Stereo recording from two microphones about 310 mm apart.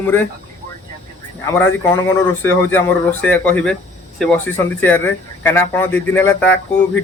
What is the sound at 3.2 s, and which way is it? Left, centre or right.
A man's voice, centre.